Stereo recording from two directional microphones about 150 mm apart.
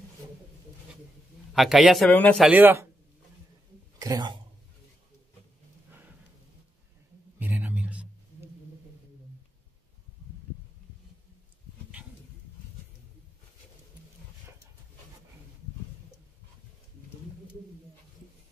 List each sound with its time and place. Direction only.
1.5 s a man's voice: centre (ahead or behind)
2.0 s speech: 10° left (ahead or behind)
2.4 s speech: 10° right (ahead or behind)
4.0 s speech: 25° right (ahead or behind)
5.9 s a sound: 10° right (ahead or behind)
7.3 s a sound: 10° right (ahead or behind)